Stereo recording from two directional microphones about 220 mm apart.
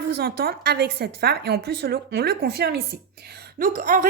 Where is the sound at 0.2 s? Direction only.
45° right (ahead or behind).